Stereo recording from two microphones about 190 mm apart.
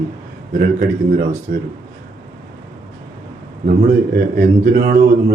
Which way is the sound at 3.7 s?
50° right (ahead or behind).